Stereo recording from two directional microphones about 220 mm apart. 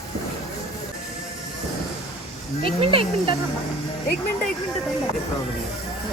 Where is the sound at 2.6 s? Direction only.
25° right (ahead or behind).